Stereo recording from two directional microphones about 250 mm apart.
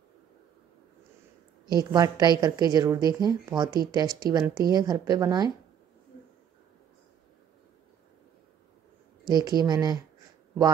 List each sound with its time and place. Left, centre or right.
1.8 s speech: centre
9.3 s speech: centre